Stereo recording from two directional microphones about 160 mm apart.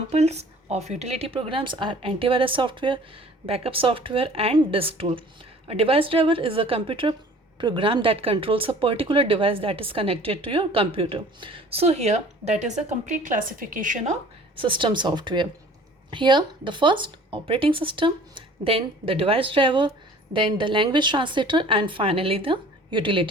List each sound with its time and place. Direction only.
0.1 s a woman's voice: 45° right (ahead or behind)
14.5 s speech: 30° right (ahead or behind)